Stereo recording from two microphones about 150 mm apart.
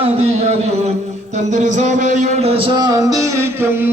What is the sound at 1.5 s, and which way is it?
Speech, 55° right (ahead or behind).